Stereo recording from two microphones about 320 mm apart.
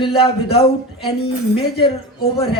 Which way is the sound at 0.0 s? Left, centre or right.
Centre.